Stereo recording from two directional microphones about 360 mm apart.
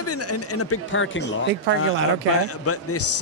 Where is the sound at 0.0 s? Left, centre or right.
Left.